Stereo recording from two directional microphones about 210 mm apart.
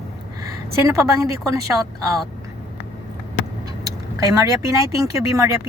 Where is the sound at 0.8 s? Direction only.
15° right (ahead or behind).